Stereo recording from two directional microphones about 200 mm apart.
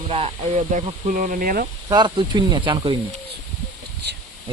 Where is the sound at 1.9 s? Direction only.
20° right (ahead or behind).